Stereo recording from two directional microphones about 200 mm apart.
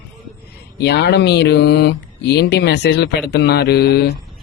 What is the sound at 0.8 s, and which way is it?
Speech, 55° left (ahead or behind).